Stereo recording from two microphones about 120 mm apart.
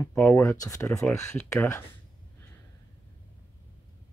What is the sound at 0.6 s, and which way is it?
Speech, 25° left (ahead or behind).